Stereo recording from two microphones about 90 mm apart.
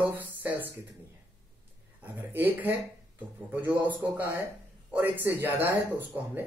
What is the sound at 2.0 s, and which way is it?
Speech, 20° right (ahead or behind).